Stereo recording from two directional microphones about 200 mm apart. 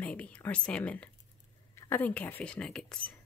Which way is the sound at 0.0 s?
5° left (ahead or behind).